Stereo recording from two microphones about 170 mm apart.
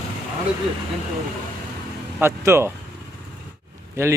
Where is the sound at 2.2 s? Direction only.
15° right (ahead or behind).